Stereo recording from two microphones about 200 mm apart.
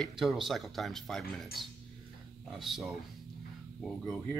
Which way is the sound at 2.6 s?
Centre (ahead or behind).